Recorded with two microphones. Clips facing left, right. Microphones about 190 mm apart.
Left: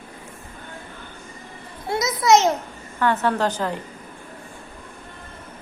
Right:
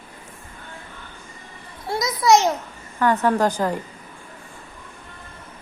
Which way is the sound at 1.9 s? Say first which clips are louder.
Even; 25° left (ahead or behind).